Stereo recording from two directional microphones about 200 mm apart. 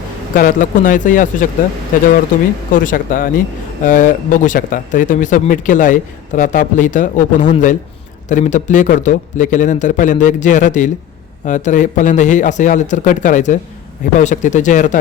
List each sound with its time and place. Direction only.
0.3 s speech: 45° left (ahead or behind)
2.7 s speech: 45° left (ahead or behind)